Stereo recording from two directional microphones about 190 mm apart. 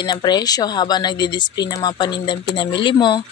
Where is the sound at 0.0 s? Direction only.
20° left (ahead or behind).